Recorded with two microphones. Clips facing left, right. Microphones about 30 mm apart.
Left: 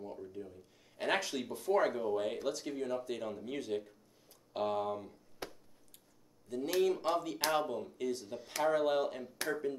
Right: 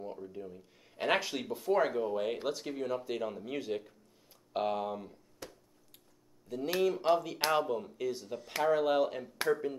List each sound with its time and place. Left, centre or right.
0.0 s speech: centre
5.4 s a sound: left
6.5 s speech: centre